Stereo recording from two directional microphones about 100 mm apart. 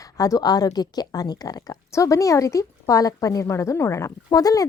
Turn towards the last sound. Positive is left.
turn(degrees=35)  # may be behind; listen again after turning